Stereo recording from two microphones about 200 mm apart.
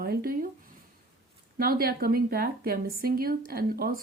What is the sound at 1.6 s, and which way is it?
Speech, 45° right (ahead or behind).